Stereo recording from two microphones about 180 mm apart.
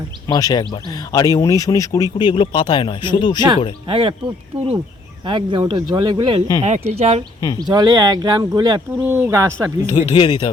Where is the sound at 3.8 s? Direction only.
30° right (ahead or behind).